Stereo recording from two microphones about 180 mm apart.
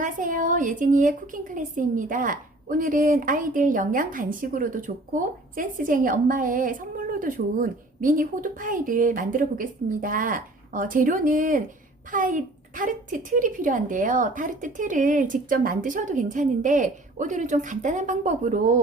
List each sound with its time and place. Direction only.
0.0 s a woman's voice: 45° right (ahead or behind)